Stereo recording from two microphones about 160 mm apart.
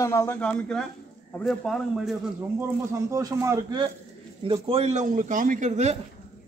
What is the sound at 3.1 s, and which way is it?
Speech, 20° right (ahead or behind).